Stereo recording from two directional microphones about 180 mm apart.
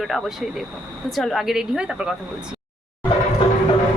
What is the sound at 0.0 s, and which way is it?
A woman's voice, centre (ahead or behind).